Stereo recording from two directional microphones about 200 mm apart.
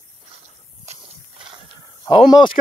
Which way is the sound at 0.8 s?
30° right (ahead or behind).